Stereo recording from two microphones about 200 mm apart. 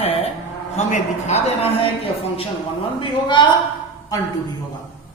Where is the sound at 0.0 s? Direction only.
30° left (ahead or behind).